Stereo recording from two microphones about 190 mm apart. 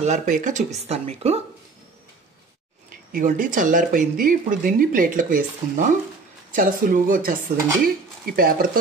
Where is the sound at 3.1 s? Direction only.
45° right (ahead or behind).